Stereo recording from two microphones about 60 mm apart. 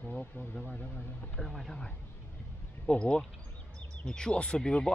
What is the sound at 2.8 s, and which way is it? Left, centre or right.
A man's voice, centre.